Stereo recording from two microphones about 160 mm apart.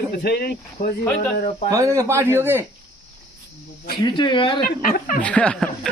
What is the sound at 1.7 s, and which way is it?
Speech, 20° right (ahead or behind).